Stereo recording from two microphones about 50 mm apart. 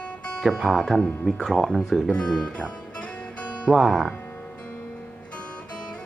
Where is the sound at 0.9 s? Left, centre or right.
Left.